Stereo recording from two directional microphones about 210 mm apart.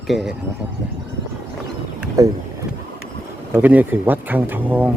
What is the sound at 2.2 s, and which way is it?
Speech, 15° right (ahead or behind).